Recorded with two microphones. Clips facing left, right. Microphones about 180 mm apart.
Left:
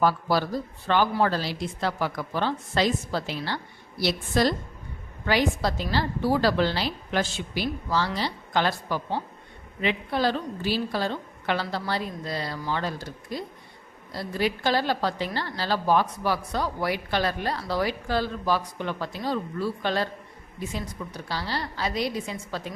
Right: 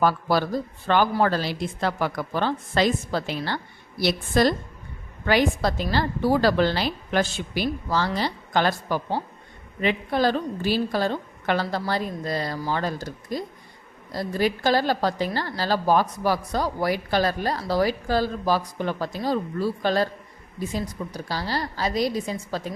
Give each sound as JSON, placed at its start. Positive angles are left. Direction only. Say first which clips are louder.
{"t": 0.0, "sound": "a woman's voice", "louder": "right 2 dB", "side_deg": -50}